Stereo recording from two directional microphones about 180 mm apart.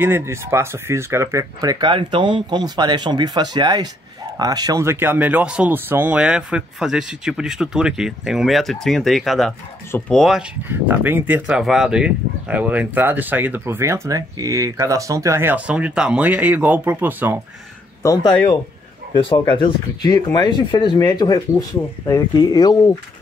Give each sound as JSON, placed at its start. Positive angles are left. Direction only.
{"t": 0.0, "sound": "speech", "side_deg": -15}
{"t": 10.7, "sound": "speech", "side_deg": -10}
{"t": 18.0, "sound": "speech", "side_deg": 20}